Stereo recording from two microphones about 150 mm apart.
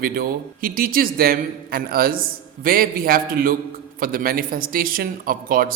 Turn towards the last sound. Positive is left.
turn(degrees=-70)  # may be behind; listen again after turning